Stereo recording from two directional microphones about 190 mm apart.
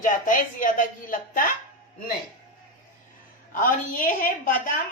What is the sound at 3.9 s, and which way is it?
Speech, 45° left (ahead or behind).